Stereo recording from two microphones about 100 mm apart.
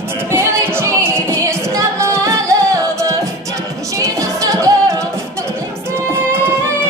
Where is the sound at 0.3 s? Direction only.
25° right (ahead or behind).